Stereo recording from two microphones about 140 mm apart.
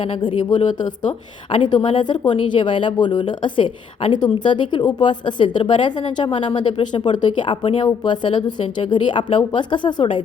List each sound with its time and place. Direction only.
0.0 s a woman's voice: 40° left (ahead or behind)